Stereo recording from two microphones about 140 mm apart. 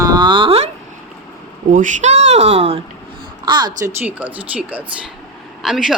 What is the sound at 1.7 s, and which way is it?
Speech, 60° right (ahead or behind).